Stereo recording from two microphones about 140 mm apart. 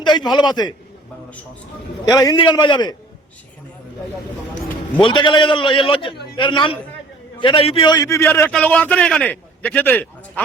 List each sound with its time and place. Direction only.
0.0 s a sound: 30° left (ahead or behind)
0.3 s a man's voice: 30° left (ahead or behind)
2.0 s a man's voice: 25° left (ahead or behind)
4.9 s a man's voice: 35° left (ahead or behind); by 10.4 s 10° left (ahead or behind)